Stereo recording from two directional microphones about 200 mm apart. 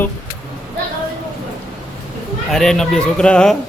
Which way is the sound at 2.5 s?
5° left (ahead or behind).